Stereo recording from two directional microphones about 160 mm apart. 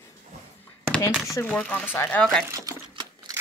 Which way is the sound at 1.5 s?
10° left (ahead or behind).